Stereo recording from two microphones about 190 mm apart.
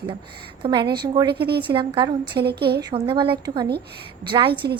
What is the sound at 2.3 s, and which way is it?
Speech, 60° right (ahead or behind).